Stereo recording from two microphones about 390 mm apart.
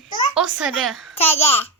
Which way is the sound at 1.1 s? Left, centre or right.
Centre.